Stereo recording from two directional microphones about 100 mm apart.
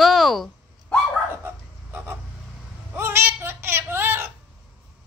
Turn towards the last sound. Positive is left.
turn(degrees=-20)  # may be behind; listen again after turning